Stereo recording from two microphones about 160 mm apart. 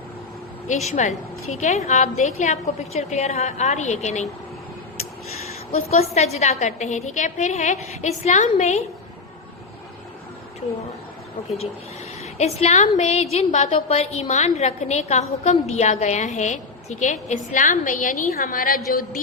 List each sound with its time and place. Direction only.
0.9 s a woman's voice: 45° left (ahead or behind)
5.5 s a sound: 40° left (ahead or behind)
6.1 s a woman's voice: 45° left (ahead or behind)
12.2 s a woman's voice: 40° left (ahead or behind); by 19.2 s 60° left (ahead or behind)